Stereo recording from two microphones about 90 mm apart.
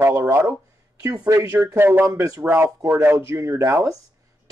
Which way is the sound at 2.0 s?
35° right (ahead or behind).